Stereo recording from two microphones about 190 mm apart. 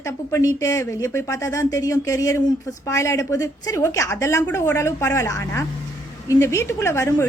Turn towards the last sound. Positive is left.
turn(degrees=15)  # may be behind; listen again after turning